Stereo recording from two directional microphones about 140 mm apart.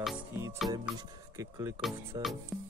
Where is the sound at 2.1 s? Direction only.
30° right (ahead or behind).